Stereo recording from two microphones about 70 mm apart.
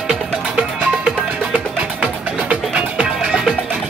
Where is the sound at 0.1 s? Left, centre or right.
Centre.